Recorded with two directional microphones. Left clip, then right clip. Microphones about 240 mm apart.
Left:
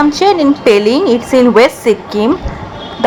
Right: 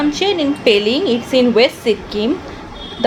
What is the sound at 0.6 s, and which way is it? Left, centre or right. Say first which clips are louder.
Speech: left 4 dB; left.